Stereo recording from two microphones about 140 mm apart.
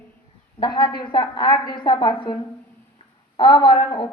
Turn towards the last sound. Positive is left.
turn(degrees=35)  # may be behind; listen again after turning